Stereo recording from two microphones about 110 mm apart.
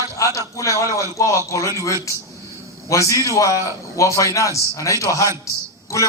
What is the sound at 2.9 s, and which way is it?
A man's voice, 30° left (ahead or behind).